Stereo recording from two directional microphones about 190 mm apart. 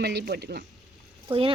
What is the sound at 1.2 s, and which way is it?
Speech, 25° right (ahead or behind).